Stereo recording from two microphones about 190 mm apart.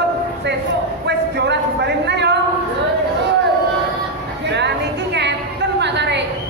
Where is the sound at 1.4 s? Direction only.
65° right (ahead or behind).